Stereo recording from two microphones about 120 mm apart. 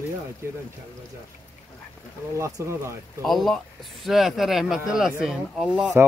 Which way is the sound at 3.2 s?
5° left (ahead or behind).